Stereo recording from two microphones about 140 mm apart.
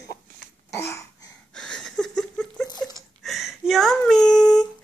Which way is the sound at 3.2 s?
Centre (ahead or behind).